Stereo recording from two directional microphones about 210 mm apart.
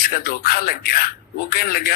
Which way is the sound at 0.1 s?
45° left (ahead or behind).